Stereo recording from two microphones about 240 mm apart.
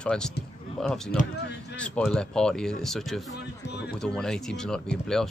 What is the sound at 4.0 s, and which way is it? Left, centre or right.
Speech, centre.